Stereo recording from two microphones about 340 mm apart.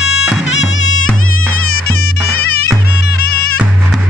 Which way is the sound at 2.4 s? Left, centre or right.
Left.